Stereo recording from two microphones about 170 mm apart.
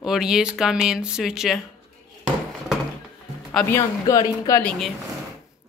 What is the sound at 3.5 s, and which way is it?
Speech, 10° left (ahead or behind).